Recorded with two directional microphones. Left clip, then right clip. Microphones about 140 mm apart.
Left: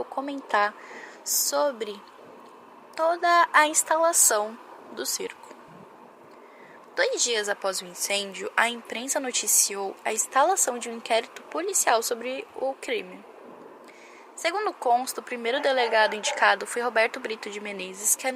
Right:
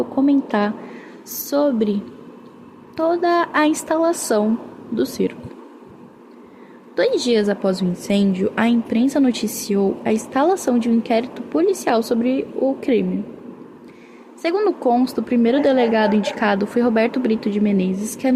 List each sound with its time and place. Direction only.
0.2 s a woman's voice: 45° left (ahead or behind)
6.9 s speech: 45° left (ahead or behind)
14.4 s speech: 45° left (ahead or behind)